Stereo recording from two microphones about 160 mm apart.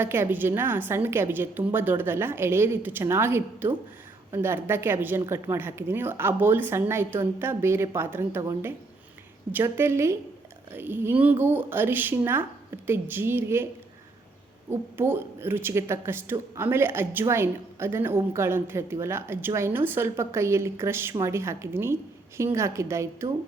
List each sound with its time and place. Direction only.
0.0 s speech: 15° right (ahead or behind)
14.7 s speech: 15° right (ahead or behind)